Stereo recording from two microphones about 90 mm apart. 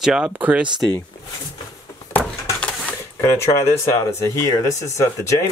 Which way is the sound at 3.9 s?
30° left (ahead or behind).